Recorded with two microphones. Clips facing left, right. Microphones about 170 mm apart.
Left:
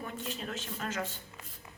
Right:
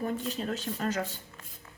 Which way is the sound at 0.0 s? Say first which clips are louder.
Right 7 dB; 40° right (ahead or behind).